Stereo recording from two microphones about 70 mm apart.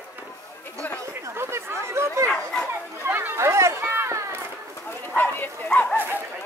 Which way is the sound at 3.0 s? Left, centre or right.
Right.